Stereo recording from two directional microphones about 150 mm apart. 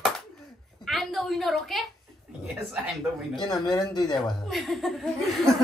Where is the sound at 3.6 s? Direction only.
30° left (ahead or behind).